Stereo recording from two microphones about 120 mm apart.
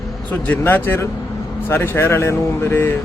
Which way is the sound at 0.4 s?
15° left (ahead or behind).